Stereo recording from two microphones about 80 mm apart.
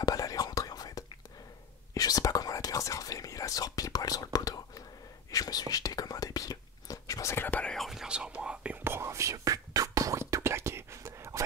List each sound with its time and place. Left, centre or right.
0.0 s whispering: left
7.6 s whispering: centre
7.9 s whispering: centre
8.8 s whispering: right